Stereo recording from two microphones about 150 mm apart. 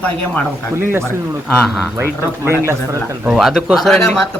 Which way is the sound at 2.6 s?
20° right (ahead or behind).